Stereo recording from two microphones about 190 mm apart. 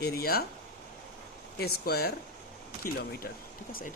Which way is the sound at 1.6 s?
55° left (ahead or behind).